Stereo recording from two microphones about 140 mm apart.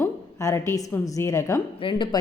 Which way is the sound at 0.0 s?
20° left (ahead or behind).